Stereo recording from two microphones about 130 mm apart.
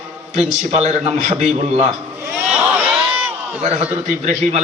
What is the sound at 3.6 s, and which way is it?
A man's voice, 55° right (ahead or behind).